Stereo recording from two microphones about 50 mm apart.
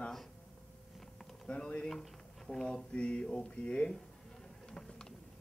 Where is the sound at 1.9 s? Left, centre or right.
Centre.